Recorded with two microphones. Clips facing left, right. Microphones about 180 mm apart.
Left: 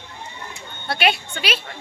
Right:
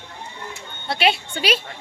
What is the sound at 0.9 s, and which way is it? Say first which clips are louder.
Speech: right 1 dB; 25° right (ahead or behind).